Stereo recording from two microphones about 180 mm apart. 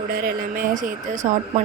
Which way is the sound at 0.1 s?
55° right (ahead or behind).